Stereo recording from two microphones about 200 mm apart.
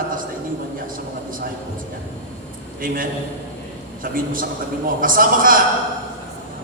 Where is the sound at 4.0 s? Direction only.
45° right (ahead or behind).